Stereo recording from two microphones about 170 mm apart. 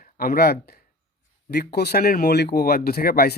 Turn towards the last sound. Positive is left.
turn(degrees=65)  # may be behind; listen again after turning